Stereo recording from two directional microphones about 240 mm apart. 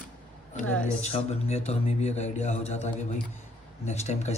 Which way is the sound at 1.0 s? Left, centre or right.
Left.